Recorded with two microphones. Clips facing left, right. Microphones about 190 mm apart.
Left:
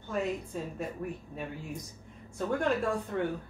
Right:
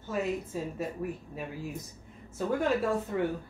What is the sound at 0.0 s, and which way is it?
Speech, 5° right (ahead or behind).